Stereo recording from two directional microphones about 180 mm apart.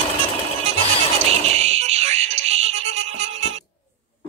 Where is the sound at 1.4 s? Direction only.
35° right (ahead or behind).